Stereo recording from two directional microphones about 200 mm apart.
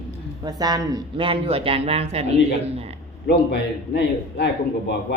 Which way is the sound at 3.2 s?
60° left (ahead or behind).